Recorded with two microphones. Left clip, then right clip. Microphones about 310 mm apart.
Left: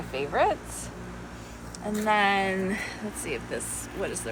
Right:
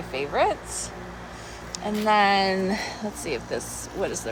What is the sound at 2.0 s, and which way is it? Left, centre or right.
Speech, centre.